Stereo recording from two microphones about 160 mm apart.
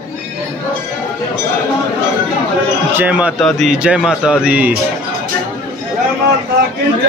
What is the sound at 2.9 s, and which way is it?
Speech, 10° right (ahead or behind).